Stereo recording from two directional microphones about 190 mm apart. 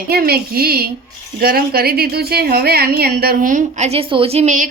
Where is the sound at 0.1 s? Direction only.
55° right (ahead or behind).